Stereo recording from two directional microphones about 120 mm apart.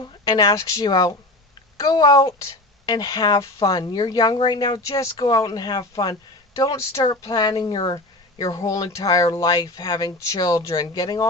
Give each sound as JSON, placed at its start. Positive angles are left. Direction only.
{"t": 0.0, "sound": "a woman's voice", "side_deg": 35}